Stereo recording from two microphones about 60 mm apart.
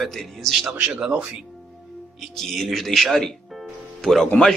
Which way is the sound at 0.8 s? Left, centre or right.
Centre.